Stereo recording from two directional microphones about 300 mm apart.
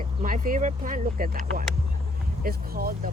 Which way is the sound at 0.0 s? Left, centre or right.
Right.